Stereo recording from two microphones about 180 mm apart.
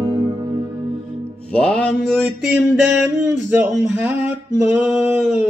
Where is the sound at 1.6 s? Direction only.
5° left (ahead or behind).